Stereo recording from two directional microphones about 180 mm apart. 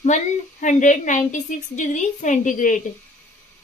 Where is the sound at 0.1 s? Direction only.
40° left (ahead or behind).